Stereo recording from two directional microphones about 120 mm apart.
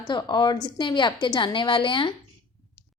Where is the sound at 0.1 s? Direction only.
40° left (ahead or behind).